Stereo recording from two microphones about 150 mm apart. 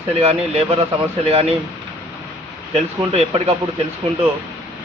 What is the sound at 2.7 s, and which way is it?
Speech, 45° right (ahead or behind).